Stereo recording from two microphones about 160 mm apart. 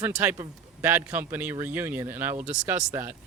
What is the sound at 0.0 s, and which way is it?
Speech, 15° right (ahead or behind).